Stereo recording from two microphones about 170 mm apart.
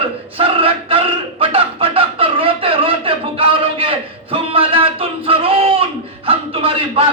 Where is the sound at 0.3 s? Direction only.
35° right (ahead or behind).